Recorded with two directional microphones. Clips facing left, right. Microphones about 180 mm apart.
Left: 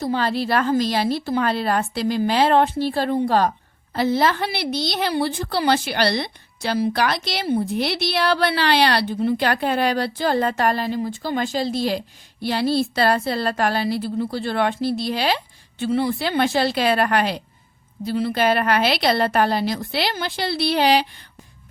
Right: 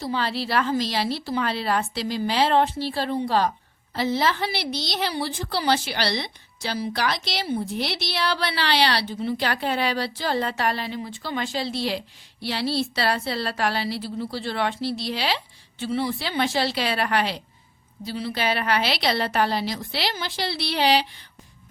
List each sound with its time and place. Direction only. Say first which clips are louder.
0.0 s a woman's voice: left 5 dB; 50° left (ahead or behind)